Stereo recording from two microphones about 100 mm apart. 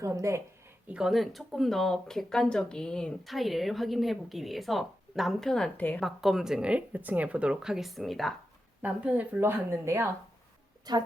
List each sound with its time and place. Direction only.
0.0 s speech: 30° right (ahead or behind)
0.9 s speech: 5° right (ahead or behind)
5.7 s a woman's voice: 15° left (ahead or behind)
6.0 s speech: centre (ahead or behind)
8.8 s speech: 15° right (ahead or behind)
10.9 s a woman's voice: 40° right (ahead or behind)